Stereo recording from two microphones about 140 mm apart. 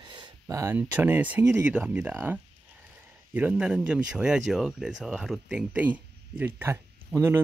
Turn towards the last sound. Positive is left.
turn(degrees=-10)  # may be behind; listen again after turning